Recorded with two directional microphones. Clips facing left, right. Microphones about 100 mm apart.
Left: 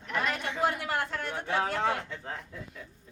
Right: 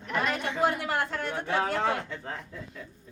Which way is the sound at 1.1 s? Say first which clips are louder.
Right 2 dB; 45° right (ahead or behind).